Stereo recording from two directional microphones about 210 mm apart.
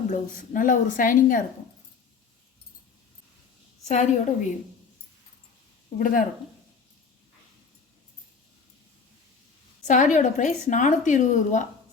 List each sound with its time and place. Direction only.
0.1 s a woman's voice: 40° left (ahead or behind)
3.8 s a woman's voice: 35° left (ahead or behind)
6.0 s a woman's voice: 40° left (ahead or behind)
9.8 s a woman's voice: 35° left (ahead or behind)